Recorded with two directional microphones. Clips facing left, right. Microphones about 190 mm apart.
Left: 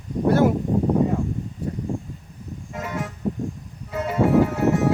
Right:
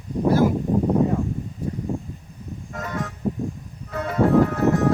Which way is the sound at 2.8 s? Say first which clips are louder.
Even; 5° left (ahead or behind).